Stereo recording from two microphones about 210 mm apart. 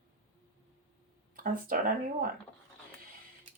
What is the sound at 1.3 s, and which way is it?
Speech, 40° right (ahead or behind).